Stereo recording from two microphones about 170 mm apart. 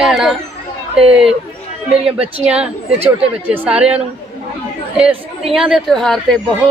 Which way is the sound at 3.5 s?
10° right (ahead or behind).